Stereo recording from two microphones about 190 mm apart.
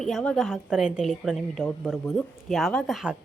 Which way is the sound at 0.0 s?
5° left (ahead or behind).